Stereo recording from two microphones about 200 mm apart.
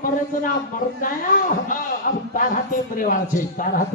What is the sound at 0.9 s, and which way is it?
Speech, 45° left (ahead or behind).